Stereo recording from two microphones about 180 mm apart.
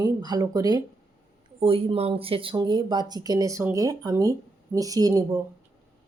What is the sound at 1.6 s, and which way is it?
Speech, 30° right (ahead or behind).